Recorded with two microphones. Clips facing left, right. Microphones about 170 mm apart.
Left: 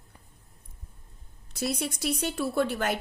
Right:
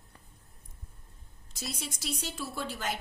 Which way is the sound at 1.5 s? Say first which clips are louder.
Left 10 dB; 60° left (ahead or behind).